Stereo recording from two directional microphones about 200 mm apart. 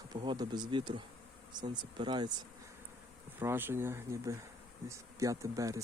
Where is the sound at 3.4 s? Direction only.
10° right (ahead or behind).